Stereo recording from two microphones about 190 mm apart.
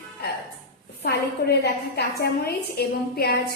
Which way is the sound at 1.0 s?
60° left (ahead or behind).